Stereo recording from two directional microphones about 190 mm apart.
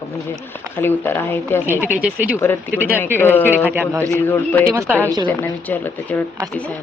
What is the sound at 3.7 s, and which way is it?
Speech, 10° right (ahead or behind).